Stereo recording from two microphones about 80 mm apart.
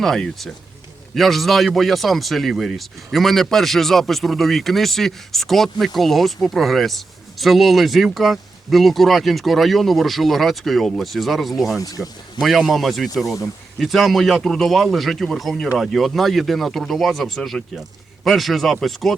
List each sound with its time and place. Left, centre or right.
0.0 s speech: centre
11.8 s speech: left
12.4 s speech: centre